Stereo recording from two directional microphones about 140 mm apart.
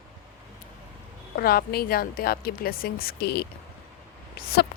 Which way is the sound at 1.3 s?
90° left.